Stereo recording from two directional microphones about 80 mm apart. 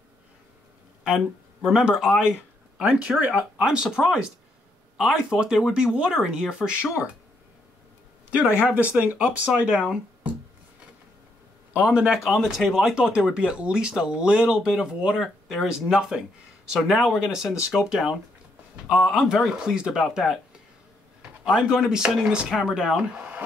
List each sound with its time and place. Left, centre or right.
1.0 s speech: centre
2.8 s speech: centre
8.3 s speech: centre
9.5 s speech: centre
11.7 s speech: centre
12.3 s speech: centre
21.5 s speech: centre